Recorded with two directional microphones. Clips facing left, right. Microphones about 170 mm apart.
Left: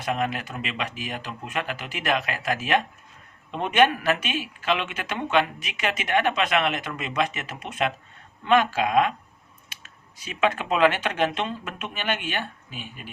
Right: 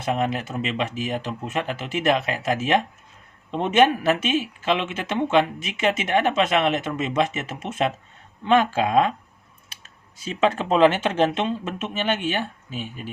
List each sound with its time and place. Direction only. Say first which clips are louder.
0.0 s speech: right 3 dB; 25° right (ahead or behind)
10.2 s speech: right 3 dB; 30° right (ahead or behind)